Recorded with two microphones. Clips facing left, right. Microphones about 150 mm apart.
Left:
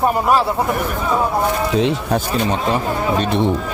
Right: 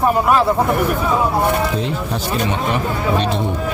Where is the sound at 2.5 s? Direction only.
35° left (ahead or behind).